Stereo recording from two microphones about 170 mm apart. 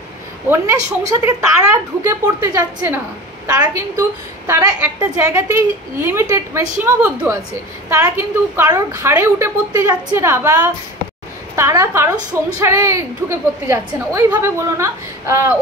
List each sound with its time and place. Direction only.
0.5 s a woman's voice: 15° right (ahead or behind)